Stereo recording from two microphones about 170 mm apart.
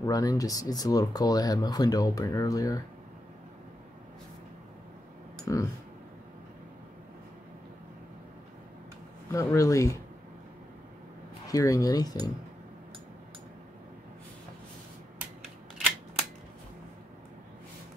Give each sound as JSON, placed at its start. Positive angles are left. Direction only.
{"t": 0.0, "sound": "speech", "side_deg": 20}
{"t": 5.4, "sound": "speech", "side_deg": 20}
{"t": 9.3, "sound": "speech", "side_deg": 20}
{"t": 11.4, "sound": "speech", "side_deg": 20}